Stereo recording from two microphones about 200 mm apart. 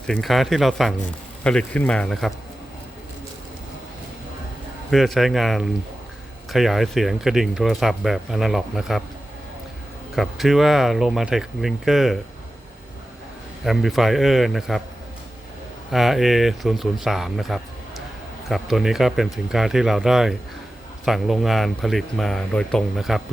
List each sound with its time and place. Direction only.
0.1 s speech: centre (ahead or behind)
4.9 s speech: centre (ahead or behind)
10.2 s speech: centre (ahead or behind)
13.7 s speech: centre (ahead or behind)
15.9 s speech: centre (ahead or behind)